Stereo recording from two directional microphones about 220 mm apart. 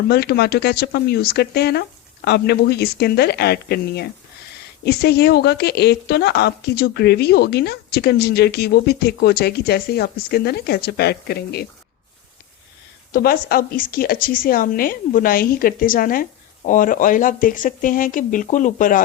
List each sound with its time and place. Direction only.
0.1 s a woman's voice: 45° left (ahead or behind)
13.1 s a woman's voice: 45° left (ahead or behind)